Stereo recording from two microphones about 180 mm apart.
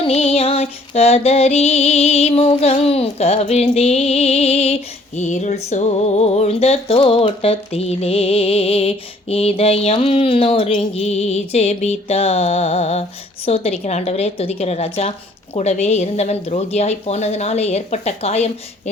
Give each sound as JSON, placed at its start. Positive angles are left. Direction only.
{"t": 0.0, "sound": "music", "side_deg": 35}